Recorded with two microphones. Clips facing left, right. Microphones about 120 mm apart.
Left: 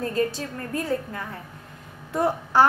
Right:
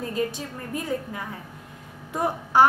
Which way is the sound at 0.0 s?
15° right (ahead or behind).